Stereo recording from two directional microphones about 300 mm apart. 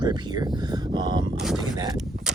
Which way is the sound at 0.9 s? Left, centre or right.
Centre.